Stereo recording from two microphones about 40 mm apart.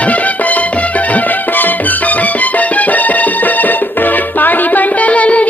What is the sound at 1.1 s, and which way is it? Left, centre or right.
Music, left.